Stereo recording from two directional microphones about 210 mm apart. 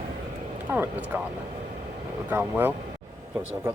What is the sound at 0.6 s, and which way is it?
Speech, 10° right (ahead or behind).